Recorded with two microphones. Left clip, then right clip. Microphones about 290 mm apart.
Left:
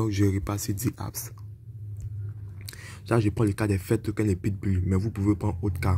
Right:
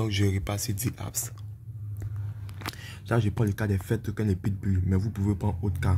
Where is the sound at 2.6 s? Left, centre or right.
Centre.